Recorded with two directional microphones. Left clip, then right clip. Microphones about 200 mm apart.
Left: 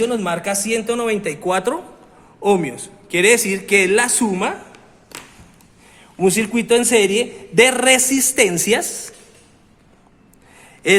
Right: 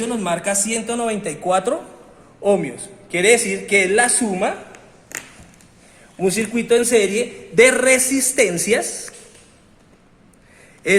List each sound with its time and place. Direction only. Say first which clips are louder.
0.0 s a man's voice: left 2 dB; 30° left (ahead or behind)
2.4 s a man's voice: left 1 dB; 55° left (ahead or behind)
6.1 s a man's voice: left 3 dB; 55° left (ahead or behind)